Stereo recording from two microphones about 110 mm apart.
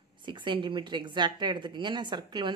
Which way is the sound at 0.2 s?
45° right (ahead or behind).